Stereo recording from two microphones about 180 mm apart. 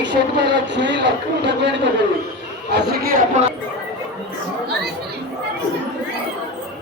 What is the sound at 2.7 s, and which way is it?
Speech, 60° right (ahead or behind).